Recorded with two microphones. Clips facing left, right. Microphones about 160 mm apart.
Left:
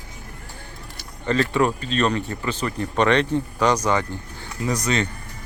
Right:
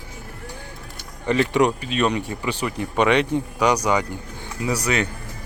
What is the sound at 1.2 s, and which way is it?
Speech, 15° right (ahead or behind).